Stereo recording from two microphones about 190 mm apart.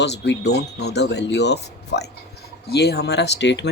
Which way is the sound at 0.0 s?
65° left (ahead or behind).